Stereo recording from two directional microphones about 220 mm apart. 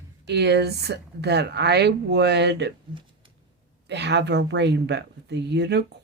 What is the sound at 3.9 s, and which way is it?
Speech, 50° right (ahead or behind).